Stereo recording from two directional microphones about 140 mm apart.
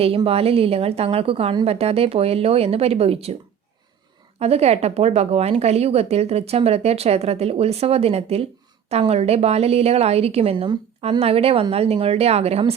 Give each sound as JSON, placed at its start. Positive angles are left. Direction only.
{"t": 0.3, "sound": "speech", "side_deg": -45}
{"t": 4.4, "sound": "speech", "side_deg": -50}